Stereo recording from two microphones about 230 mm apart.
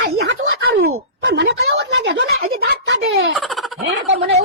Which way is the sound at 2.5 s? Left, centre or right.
Right.